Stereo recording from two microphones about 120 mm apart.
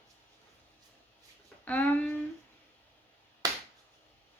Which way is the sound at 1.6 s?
10° left (ahead or behind).